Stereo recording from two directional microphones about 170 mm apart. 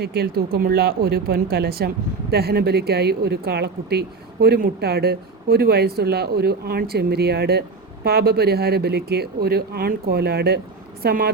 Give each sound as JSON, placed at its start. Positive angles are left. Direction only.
{"t": 0.0, "sound": "a woman's voice", "side_deg": -65}